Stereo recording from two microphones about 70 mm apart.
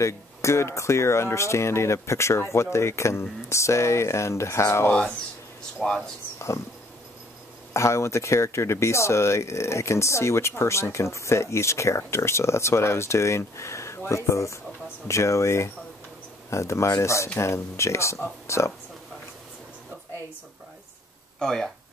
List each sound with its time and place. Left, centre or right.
0.0 s speech: left
5.8 s speech: centre
7.7 s speech: left
21.4 s speech: centre